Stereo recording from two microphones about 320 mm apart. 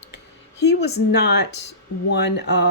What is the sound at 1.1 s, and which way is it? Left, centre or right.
Speech, left.